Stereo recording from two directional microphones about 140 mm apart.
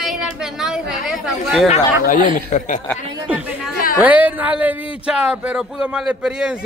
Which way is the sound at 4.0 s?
10° right (ahead or behind).